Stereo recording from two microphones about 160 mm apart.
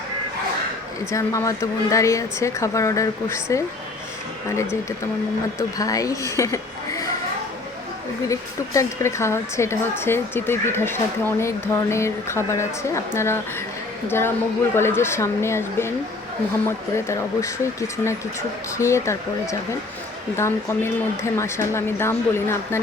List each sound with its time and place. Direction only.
1.1 s a woman's voice: 20° left (ahead or behind)
8.3 s a woman's voice: 20° left (ahead or behind)